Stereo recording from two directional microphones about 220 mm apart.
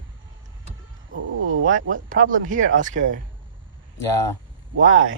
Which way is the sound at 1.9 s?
35° right (ahead or behind).